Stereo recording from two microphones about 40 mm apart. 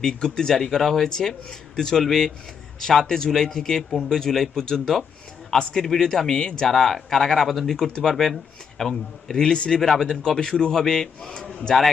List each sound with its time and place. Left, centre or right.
0.0 s a man's voice: centre